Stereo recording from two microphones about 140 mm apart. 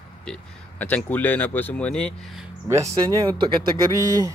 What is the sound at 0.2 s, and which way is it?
Speech, 10° left (ahead or behind).